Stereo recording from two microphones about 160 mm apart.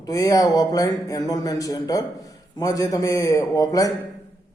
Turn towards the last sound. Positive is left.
turn(degrees=20)  # may be behind; listen again after turning